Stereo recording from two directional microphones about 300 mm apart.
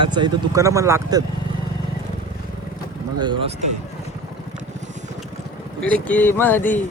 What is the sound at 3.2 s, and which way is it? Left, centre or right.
Speech, centre.